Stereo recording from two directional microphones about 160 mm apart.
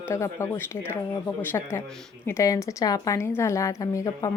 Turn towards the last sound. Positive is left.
turn(degrees=20)  # may be behind; listen again after turning